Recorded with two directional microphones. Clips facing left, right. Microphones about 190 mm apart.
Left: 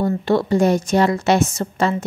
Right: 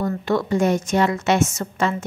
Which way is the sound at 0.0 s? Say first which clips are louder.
Left 4 dB; 30° left (ahead or behind).